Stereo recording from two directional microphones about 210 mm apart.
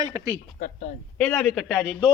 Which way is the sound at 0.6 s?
35° left (ahead or behind).